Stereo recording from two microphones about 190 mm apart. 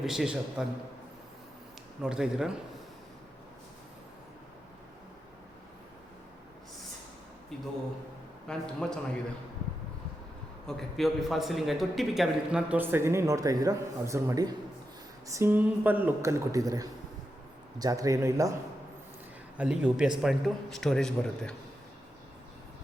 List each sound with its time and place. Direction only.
0.0 s a man's voice: centre (ahead or behind)
2.0 s a man's voice: 5° right (ahead or behind)
7.5 s a man's voice: centre (ahead or behind)
10.7 s a man's voice: centre (ahead or behind); by 18.5 s 15° right (ahead or behind)
19.5 s a man's voice: 5° right (ahead or behind)